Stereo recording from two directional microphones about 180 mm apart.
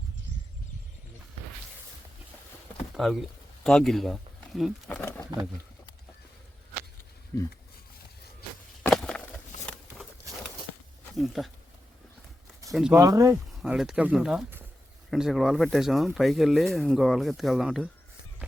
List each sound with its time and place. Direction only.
2.9 s speech: centre (ahead or behind)
4.9 s speech: 10° left (ahead or behind)
7.3 s speech: 15° left (ahead or behind)
8.8 s a sound: 5° left (ahead or behind)
11.1 s speech: centre (ahead or behind)
12.7 s speech: 5° right (ahead or behind)
13.0 s speech: 20° right (ahead or behind)
13.5 s speech: centre (ahead or behind)